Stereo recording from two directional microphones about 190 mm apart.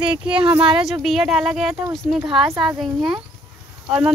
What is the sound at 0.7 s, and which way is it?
Speech, 5° right (ahead or behind).